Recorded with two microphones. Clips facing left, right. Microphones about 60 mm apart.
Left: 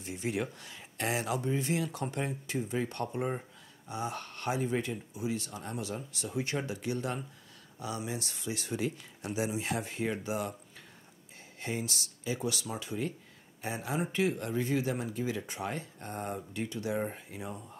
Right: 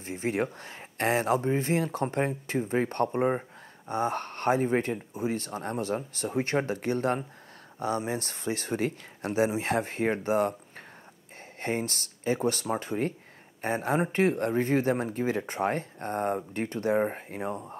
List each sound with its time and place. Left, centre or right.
0.0 s speech: right
11.6 s speech: right